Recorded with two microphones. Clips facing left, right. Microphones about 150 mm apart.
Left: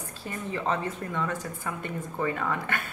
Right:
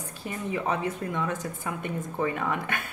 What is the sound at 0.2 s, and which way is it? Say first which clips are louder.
A woman's voice: right 2 dB; 15° right (ahead or behind).